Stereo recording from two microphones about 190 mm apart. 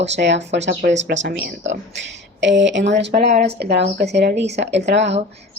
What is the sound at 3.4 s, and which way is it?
Speech, 60° right (ahead or behind).